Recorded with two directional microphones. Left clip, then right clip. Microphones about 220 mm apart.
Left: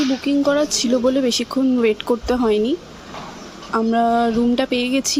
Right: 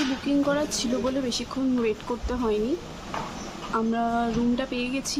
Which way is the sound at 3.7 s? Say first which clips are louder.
Left 9 dB; 25° left (ahead or behind).